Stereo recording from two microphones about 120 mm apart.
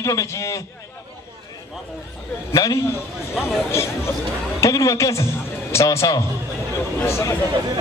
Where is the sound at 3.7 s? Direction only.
20° left (ahead or behind).